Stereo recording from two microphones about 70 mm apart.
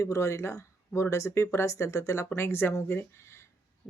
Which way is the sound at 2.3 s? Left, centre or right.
Left.